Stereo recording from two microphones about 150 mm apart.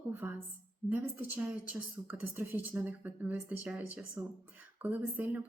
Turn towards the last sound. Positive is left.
turn(degrees=-10)  # may be behind; listen again after turning